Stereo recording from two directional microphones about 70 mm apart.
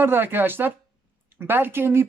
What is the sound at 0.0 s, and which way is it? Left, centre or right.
Speech, right.